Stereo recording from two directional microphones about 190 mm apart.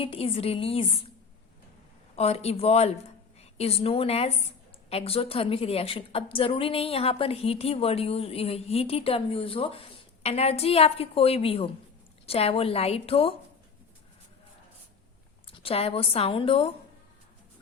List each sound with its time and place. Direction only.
0.0 s a woman's voice: 30° left (ahead or behind)
2.1 s a woman's voice: 35° left (ahead or behind)
15.4 s speech: 30° left (ahead or behind)